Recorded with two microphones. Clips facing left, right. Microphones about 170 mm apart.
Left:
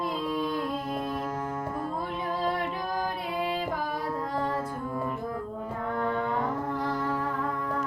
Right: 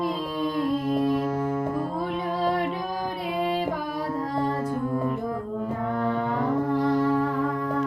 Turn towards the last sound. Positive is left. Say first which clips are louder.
# right 8 dB
turn(degrees=-30)  # may be behind; listen again after turning